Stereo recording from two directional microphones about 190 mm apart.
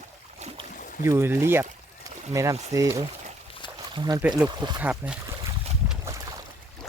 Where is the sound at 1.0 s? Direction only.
10° right (ahead or behind).